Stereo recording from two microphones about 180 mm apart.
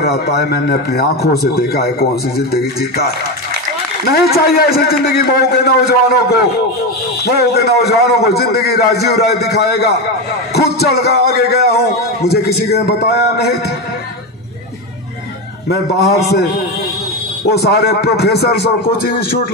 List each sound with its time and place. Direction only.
0.0 s a man's voice: 65° left (ahead or behind)
7.2 s a man's voice: 60° left (ahead or behind)
17.5 s a man's voice: 65° left (ahead or behind)